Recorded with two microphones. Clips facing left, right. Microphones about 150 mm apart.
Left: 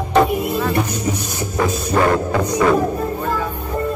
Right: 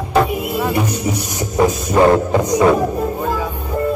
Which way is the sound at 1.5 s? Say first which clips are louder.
Right 4 dB; 20° right (ahead or behind).